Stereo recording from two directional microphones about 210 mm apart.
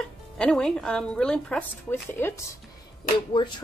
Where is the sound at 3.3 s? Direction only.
20° left (ahead or behind).